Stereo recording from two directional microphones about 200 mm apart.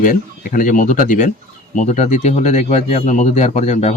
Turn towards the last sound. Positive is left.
turn(degrees=35)  # may be behind; listen again after turning